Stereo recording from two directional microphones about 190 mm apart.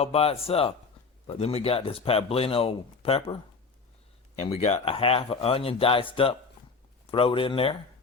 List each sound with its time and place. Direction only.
0.0 s speech: 30° left (ahead or behind)
4.4 s speech: 35° left (ahead or behind)